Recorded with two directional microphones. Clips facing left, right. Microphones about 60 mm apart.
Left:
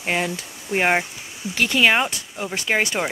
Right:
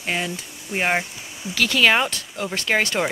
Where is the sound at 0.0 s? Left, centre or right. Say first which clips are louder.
Left 2 dB; left.